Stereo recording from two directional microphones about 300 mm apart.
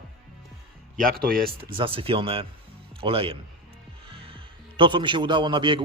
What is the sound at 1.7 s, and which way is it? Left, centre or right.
A man's voice, centre.